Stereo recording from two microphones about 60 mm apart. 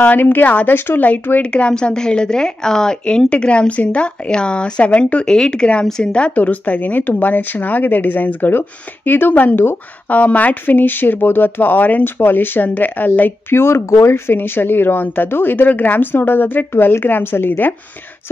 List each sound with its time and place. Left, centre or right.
0.0 s a woman's voice: left
1.4 s a woman's voice: centre